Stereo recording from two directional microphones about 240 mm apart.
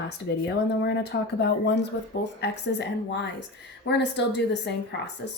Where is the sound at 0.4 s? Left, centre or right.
Left.